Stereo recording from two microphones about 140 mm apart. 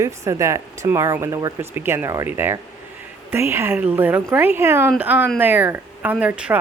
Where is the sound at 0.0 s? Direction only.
20° right (ahead or behind).